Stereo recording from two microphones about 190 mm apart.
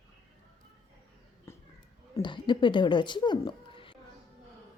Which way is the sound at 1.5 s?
15° left (ahead or behind).